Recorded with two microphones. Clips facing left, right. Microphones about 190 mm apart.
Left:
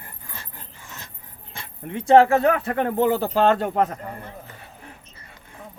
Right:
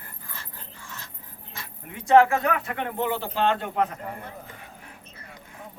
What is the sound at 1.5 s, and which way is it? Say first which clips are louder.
Speech: left 9 dB; 30° left (ahead or behind).